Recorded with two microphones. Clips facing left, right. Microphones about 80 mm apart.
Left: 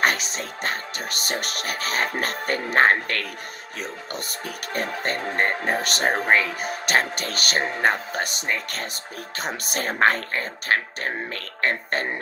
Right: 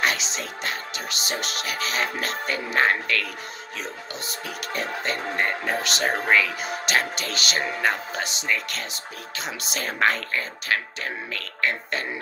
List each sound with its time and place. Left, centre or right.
0.0 s speech: left
4.7 s speech: left